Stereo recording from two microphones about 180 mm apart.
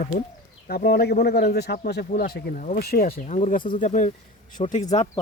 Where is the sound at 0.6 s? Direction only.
60° left (ahead or behind); by 5.1 s 40° left (ahead or behind).